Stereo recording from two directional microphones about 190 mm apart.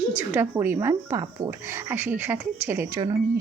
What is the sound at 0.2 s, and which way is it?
Speech, 10° right (ahead or behind).